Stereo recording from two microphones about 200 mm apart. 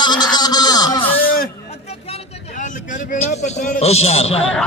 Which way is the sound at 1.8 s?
30° left (ahead or behind).